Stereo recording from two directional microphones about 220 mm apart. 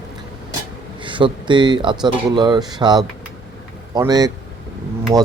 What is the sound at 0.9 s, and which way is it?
A man's voice, 20° right (ahead or behind).